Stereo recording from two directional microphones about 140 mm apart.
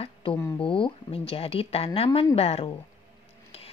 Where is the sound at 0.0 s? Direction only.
40° left (ahead or behind).